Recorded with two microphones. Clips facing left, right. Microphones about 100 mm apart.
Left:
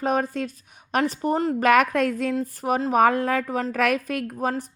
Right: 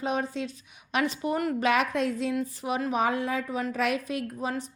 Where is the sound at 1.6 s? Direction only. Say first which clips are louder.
Left 8 dB; 50° left (ahead or behind).